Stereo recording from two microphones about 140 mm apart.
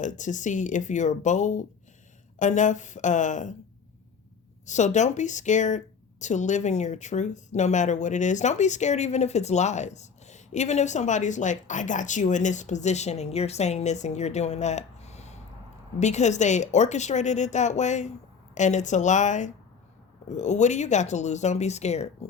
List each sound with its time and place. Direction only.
0.0 s speech: 60° left (ahead or behind)
4.6 s speech: 60° left (ahead or behind)